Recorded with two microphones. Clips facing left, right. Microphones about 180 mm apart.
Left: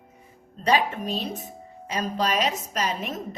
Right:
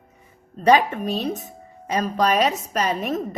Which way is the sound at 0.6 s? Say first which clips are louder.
Right 6 dB; 50° right (ahead or behind).